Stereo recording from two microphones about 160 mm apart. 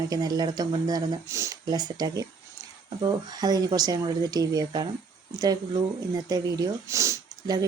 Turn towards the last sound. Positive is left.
turn(degrees=-20)  # may be behind; listen again after turning